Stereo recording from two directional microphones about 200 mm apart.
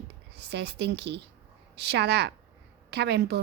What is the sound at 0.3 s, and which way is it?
Speech, 55° right (ahead or behind).